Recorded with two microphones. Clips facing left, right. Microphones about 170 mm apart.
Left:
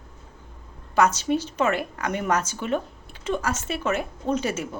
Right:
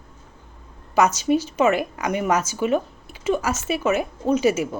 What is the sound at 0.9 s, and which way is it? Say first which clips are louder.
A woman's voice: right 3 dB; 10° right (ahead or behind).